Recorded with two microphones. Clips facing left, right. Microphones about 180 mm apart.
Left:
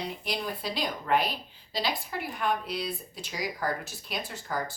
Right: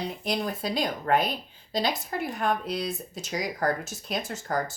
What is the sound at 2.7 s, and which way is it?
Speech, 45° right (ahead or behind).